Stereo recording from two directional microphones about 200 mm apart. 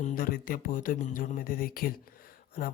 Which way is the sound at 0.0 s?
45° left (ahead or behind).